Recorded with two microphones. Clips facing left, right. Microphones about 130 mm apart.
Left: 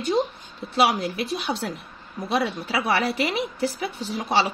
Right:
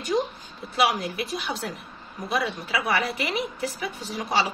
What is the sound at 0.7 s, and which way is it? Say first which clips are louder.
Speech: left 2 dB; 30° left (ahead or behind).